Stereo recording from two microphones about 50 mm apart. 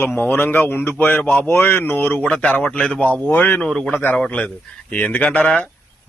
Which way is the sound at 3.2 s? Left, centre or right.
Left.